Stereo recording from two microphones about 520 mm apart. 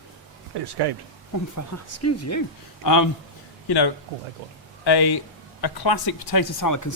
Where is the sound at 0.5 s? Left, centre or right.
Right.